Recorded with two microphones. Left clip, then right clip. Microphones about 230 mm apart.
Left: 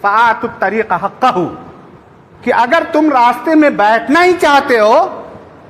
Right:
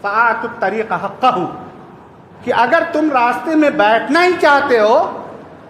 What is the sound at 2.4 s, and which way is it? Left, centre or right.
A man's voice, left.